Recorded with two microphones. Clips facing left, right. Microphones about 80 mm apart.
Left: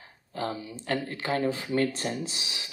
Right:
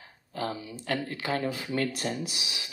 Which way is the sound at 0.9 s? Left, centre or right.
Left.